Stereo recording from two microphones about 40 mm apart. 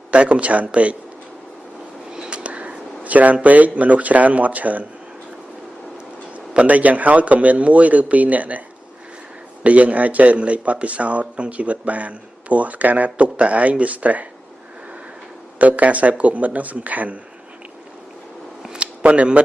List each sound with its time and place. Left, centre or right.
0.1 s speech: right
2.1 s a sound: right
3.4 s speech: right
6.3 s speech: right
15.6 s speech: right
19.0 s speech: right